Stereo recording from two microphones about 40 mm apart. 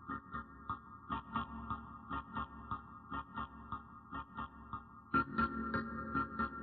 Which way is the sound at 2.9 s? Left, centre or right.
Left.